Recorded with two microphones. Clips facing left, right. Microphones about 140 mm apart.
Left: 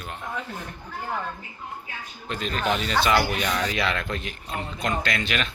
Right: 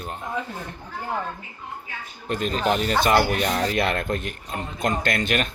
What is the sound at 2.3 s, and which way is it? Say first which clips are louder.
A man's voice: right 3 dB; 50° right (ahead or behind).